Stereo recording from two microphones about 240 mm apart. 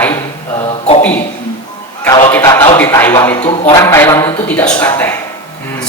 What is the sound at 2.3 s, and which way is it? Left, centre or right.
Speech, centre.